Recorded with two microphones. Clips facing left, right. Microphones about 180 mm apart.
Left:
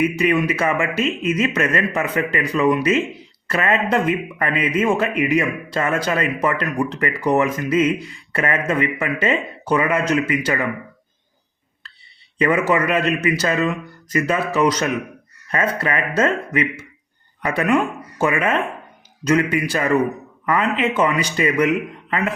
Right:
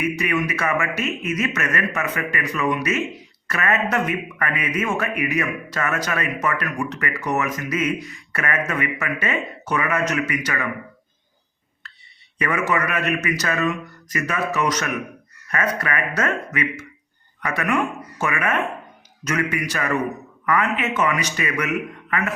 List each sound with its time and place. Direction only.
0.0 s speech: 30° left (ahead or behind)
12.4 s speech: 30° left (ahead or behind)